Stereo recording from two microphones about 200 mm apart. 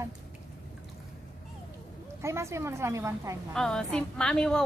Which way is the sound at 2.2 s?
15° right (ahead or behind).